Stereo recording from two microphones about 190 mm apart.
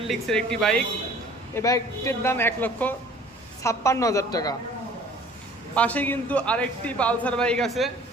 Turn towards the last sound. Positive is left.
turn(degrees=0)  # may be behind; listen again after turning